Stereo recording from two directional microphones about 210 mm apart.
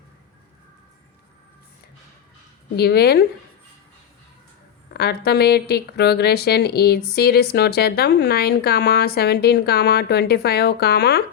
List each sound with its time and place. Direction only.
2.7 s speech: 50° left (ahead or behind)
4.9 s speech: 50° left (ahead or behind)